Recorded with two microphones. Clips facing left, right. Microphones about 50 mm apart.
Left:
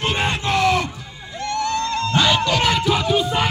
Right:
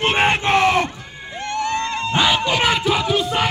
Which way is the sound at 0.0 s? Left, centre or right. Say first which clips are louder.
Right 4 dB; right.